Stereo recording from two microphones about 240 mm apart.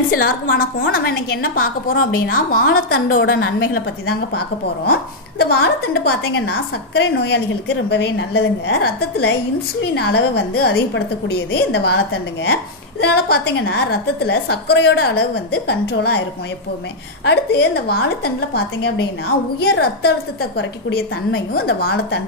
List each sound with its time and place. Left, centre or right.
0.1 s a woman's voice: left
5.4 s a woman's voice: left
21.3 s a woman's voice: left